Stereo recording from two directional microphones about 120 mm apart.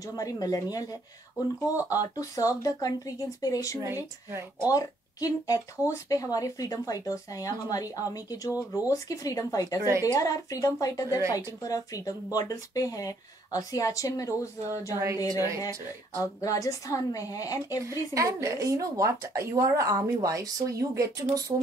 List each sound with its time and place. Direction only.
0.2 s speech: 30° left (ahead or behind)
1.9 s speech: 30° left (ahead or behind)
4.3 s speech: 20° right (ahead or behind)
4.6 s speech: 30° left (ahead or behind)
8.5 s speech: 15° right (ahead or behind)
8.9 s speech: 25° left (ahead or behind)
9.8 s speech: 25° right (ahead or behind)
10.1 s speech: 30° left (ahead or behind)
17.8 s speech: 25° right (ahead or behind)